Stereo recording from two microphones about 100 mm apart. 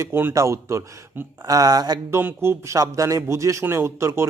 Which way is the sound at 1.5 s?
40° right (ahead or behind).